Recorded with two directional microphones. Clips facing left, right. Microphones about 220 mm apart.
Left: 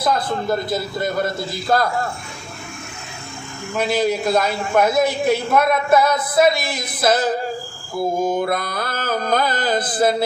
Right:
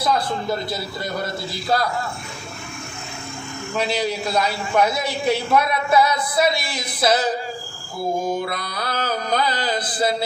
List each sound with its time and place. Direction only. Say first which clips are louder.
0.7 s a man's voice: left 5 dB; 50° left (ahead or behind)
3.8 s a man's voice: left 4 dB; 50° left (ahead or behind)
8.4 s a man's voice: left 5 dB; 50° left (ahead or behind)